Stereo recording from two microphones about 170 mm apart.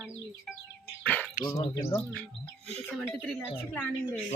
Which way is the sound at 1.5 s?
25° left (ahead or behind).